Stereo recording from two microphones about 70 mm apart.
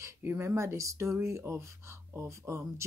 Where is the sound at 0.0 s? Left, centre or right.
Right.